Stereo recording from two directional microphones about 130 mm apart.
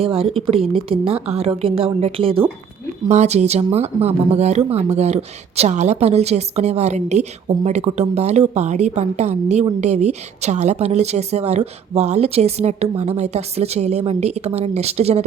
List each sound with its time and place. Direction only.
0.0 s a woman's voice: 45° right (ahead or behind)
3.1 s speech: 60° right (ahead or behind)